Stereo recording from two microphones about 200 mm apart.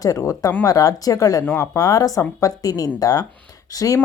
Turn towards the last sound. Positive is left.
turn(degrees=15)  # may be behind; listen again after turning